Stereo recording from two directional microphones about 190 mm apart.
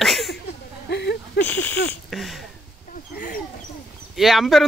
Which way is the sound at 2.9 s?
45° left (ahead or behind).